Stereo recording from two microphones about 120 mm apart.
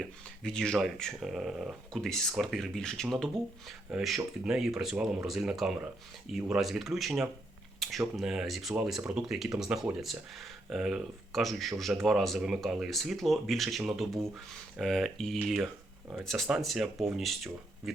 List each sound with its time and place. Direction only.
0.0 s speech: 5° left (ahead or behind)